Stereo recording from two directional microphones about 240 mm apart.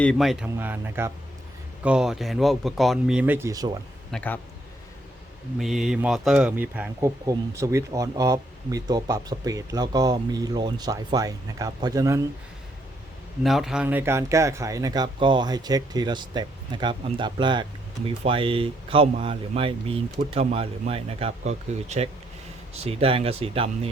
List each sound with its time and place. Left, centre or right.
0.0 s speech: centre
4.1 s a man's voice: centre
5.5 s speech: centre
13.4 s speech: centre; by 23.9 s right